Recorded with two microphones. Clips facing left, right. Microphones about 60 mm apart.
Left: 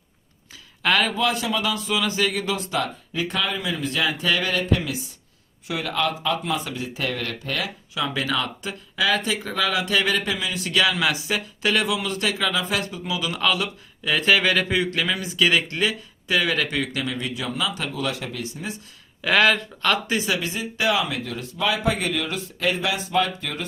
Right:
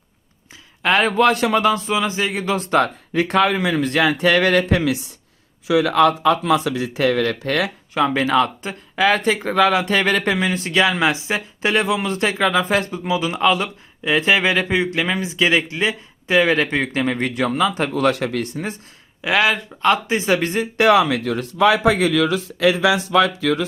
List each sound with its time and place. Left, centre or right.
0.8 s a man's voice: right
1.1 s speech: right
1.6 s speech: right
2.6 s speech: right
7.9 s speech: right
17.9 s speech: right
19.2 s speech: centre; by 23.6 s right